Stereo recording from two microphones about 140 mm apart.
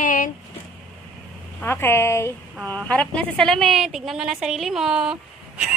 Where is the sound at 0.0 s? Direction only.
70° left (ahead or behind).